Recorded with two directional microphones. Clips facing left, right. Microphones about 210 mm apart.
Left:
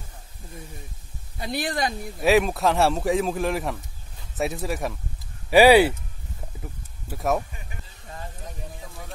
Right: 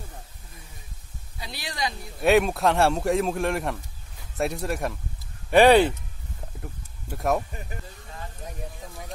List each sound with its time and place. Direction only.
1.4 s speech: 50° left (ahead or behind)
2.2 s speech: centre (ahead or behind)
6.6 s a sound: centre (ahead or behind)